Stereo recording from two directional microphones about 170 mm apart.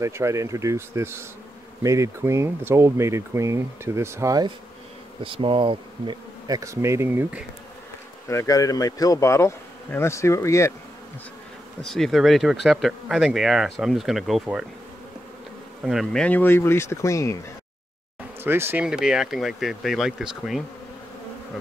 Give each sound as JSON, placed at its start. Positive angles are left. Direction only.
{"t": 0.0, "sound": "speech", "side_deg": -15}
{"t": 5.2, "sound": "bee", "side_deg": -30}
{"t": 8.3, "sound": "speech", "side_deg": 20}
{"t": 11.8, "sound": "speech", "side_deg": 0}
{"t": 15.8, "sound": "speech", "side_deg": 0}
{"t": 18.4, "sound": "speech", "side_deg": -15}